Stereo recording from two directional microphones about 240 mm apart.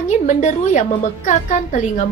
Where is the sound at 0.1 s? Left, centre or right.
Left.